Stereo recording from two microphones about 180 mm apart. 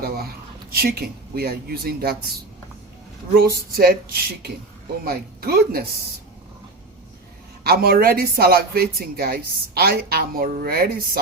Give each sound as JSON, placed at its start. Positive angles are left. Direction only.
{"t": 0.0, "sound": "a sound", "side_deg": -60}
{"t": 3.3, "sound": "speech", "side_deg": -55}
{"t": 7.6, "sound": "speech", "side_deg": -60}